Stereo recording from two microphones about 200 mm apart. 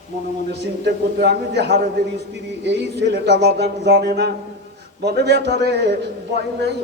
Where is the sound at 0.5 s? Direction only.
55° right (ahead or behind).